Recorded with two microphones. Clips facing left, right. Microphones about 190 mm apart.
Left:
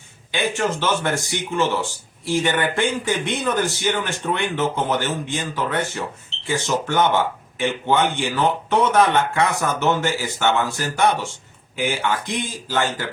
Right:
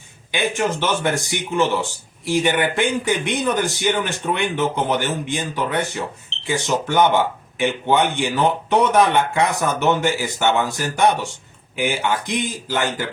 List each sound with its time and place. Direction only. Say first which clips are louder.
0.3 s speech: right 1 dB; 15° right (ahead or behind)